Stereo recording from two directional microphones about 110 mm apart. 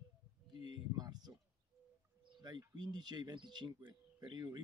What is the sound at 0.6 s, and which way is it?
Speech, 40° right (ahead or behind).